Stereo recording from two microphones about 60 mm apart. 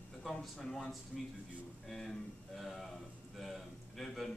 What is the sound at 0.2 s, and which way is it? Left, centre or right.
Speech, centre.